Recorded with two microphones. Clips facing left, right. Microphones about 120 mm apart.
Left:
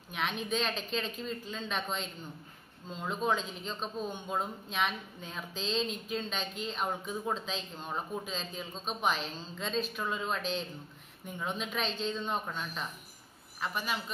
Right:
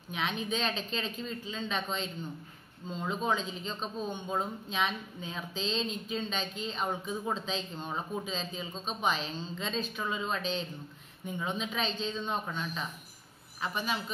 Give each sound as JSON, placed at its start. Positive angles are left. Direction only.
{"t": 0.1, "sound": "a man's voice", "side_deg": 0}
{"t": 6.9, "sound": "speech", "side_deg": -10}
{"t": 7.4, "sound": "a man's voice", "side_deg": 0}